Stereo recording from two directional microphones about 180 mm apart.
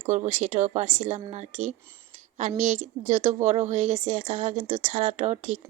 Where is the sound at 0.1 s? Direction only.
40° right (ahead or behind).